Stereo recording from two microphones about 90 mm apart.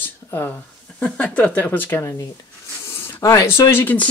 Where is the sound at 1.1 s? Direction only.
20° left (ahead or behind).